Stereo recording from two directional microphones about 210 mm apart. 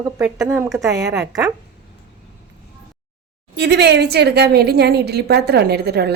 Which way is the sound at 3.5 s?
55° right (ahead or behind).